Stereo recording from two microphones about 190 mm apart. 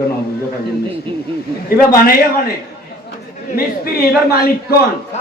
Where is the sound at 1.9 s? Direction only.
50° left (ahead or behind).